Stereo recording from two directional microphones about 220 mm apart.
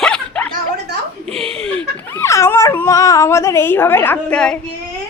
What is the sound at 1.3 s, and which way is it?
Speech, 25° right (ahead or behind).